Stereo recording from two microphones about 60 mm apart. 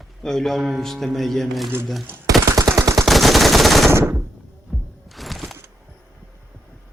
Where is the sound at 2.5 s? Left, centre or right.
Right.